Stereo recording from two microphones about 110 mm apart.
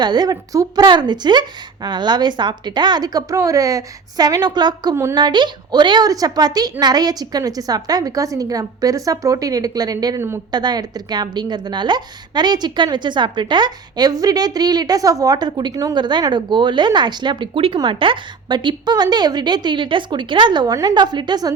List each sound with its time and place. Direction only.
0.0 s a woman's voice: 40° right (ahead or behind)
10.2 s speech: 25° right (ahead or behind)
10.5 s a woman's voice: 40° right (ahead or behind)